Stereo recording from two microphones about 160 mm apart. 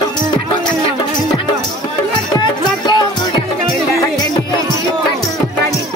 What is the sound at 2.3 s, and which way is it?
Music, 25° left (ahead or behind).